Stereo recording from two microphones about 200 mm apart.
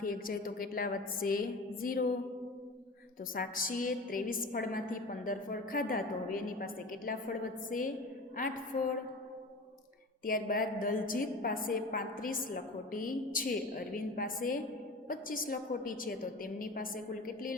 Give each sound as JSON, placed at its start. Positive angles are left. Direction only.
{"t": 0.0, "sound": "a woman's voice", "side_deg": 45}
{"t": 3.3, "sound": "a woman's voice", "side_deg": 45}
{"t": 10.2, "sound": "a woman's voice", "side_deg": 45}